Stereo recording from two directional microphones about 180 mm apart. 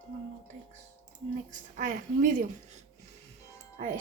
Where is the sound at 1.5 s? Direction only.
45° right (ahead or behind).